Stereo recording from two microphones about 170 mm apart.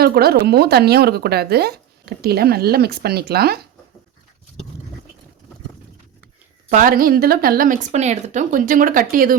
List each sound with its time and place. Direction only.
0.0 s speech: 65° right (ahead or behind)
6.7 s a woman's voice: 50° right (ahead or behind)